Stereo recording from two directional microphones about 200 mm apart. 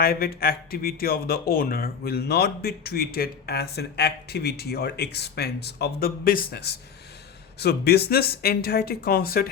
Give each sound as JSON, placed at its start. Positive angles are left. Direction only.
{"t": 0.0, "sound": "a man's voice", "side_deg": 50}